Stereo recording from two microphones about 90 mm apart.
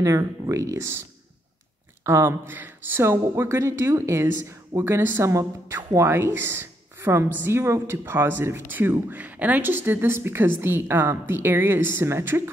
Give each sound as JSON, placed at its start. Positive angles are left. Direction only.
{"t": 0.0, "sound": "speech", "side_deg": -35}
{"t": 2.0, "sound": "speech", "side_deg": -30}